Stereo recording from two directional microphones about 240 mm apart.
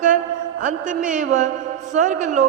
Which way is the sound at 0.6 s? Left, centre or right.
Right.